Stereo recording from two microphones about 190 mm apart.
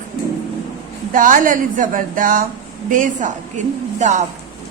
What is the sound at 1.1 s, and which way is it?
A woman's voice, 45° right (ahead or behind).